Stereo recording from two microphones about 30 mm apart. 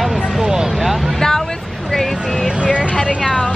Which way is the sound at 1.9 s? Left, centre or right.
Centre.